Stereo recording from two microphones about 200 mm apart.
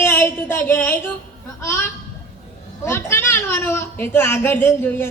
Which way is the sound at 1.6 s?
15° left (ahead or behind).